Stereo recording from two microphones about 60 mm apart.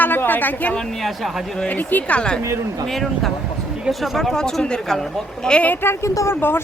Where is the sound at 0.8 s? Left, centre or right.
Centre.